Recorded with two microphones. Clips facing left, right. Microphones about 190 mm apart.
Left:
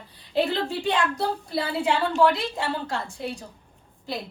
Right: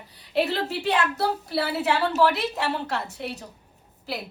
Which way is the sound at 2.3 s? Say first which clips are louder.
Right 1 dB; 20° right (ahead or behind).